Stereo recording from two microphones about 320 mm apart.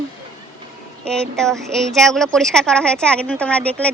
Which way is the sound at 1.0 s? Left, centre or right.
Centre.